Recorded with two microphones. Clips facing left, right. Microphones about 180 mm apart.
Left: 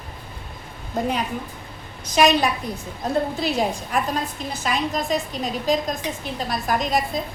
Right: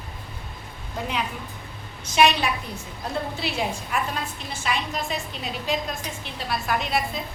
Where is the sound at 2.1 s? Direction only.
40° left (ahead or behind).